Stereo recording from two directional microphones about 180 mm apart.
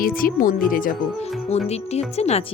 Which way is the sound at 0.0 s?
50° left (ahead or behind).